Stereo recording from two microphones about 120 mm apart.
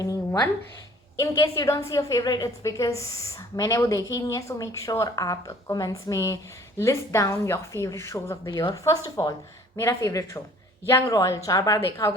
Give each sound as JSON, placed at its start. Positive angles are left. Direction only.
{"t": 0.0, "sound": "a woman's voice", "side_deg": 30}